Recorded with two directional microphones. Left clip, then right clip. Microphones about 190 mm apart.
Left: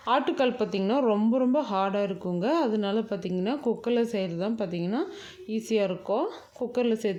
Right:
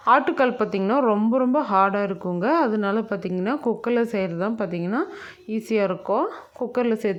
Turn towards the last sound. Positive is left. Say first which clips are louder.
# right 4 dB
turn(degrees=-15)  # may be behind; listen again after turning